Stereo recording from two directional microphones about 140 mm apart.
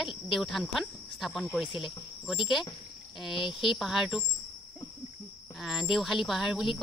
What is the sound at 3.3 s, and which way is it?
Speech, 35° left (ahead or behind).